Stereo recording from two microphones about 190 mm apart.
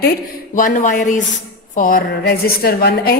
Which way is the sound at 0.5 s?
45° left (ahead or behind).